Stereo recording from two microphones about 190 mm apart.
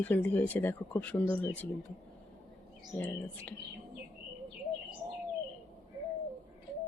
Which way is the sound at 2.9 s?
10° left (ahead or behind).